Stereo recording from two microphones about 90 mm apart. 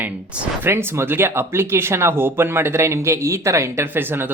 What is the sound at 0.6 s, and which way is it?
Speech, 25° right (ahead or behind).